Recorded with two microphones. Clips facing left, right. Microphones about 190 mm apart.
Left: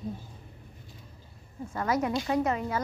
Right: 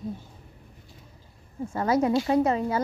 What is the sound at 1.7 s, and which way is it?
Speech, 30° right (ahead or behind).